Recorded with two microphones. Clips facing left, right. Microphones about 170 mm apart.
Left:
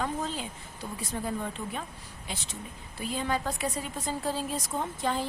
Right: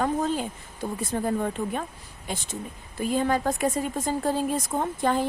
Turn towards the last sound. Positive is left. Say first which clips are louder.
# right 6 dB
turn(degrees=-50)  # may be behind; listen again after turning